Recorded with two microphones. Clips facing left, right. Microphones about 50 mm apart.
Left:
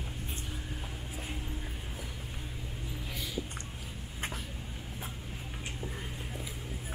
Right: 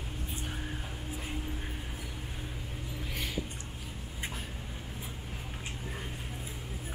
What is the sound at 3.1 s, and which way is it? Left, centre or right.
Music, right.